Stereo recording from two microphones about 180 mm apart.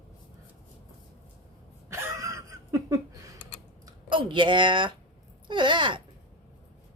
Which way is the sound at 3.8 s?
25° right (ahead or behind).